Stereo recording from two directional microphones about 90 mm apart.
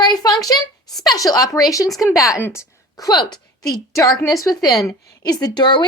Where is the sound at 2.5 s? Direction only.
35° left (ahead or behind).